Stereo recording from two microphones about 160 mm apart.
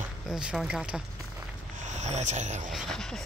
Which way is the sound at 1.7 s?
50° right (ahead or behind).